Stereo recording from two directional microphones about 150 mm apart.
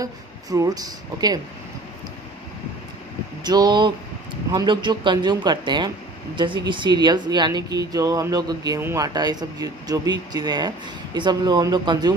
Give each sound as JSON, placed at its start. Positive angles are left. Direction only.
{"t": 0.5, "sound": "speech", "side_deg": -25}
{"t": 3.4, "sound": "speech", "side_deg": -25}
{"t": 8.8, "sound": "speech", "side_deg": -15}
{"t": 9.1, "sound": "speech", "side_deg": -25}